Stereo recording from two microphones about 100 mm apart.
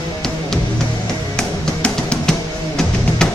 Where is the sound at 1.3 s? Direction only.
5° left (ahead or behind).